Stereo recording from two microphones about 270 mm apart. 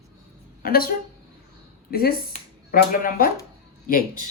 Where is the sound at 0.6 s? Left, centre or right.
Left.